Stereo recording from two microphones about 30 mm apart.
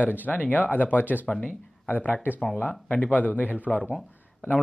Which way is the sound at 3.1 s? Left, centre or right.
Left.